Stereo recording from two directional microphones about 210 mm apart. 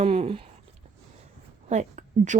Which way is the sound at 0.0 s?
30° right (ahead or behind).